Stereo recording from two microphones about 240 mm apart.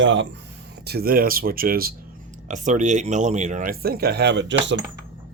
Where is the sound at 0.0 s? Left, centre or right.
Right.